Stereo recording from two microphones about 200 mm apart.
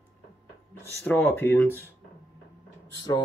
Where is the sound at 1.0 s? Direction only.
10° left (ahead or behind).